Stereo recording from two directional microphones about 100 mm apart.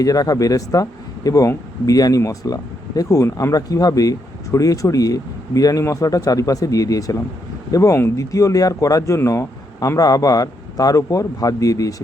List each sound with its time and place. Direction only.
0.0 s speech: 35° left (ahead or behind)